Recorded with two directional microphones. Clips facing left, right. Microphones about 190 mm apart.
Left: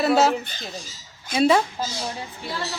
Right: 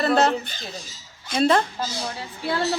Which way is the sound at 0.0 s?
5° left (ahead or behind).